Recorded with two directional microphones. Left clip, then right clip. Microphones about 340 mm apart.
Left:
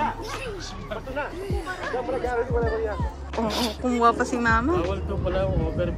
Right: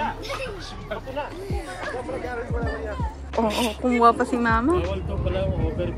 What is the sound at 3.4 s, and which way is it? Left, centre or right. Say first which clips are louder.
Speech: right 3 dB; centre.